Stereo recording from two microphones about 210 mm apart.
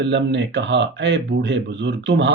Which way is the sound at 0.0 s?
60° right (ahead or behind).